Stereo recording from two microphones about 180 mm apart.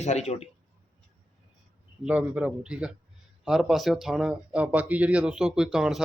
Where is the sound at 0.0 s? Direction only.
40° left (ahead or behind).